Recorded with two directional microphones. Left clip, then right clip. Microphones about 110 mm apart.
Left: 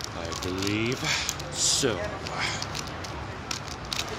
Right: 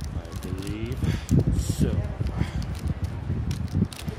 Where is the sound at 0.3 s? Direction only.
25° left (ahead or behind).